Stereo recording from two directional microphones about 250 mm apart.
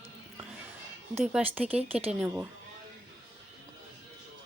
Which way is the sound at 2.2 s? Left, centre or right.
Centre.